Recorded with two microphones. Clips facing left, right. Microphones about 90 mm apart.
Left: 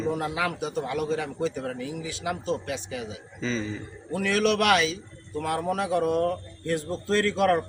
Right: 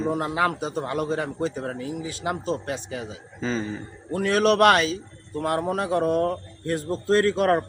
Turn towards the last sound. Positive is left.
turn(degrees=-40)  # may be behind; listen again after turning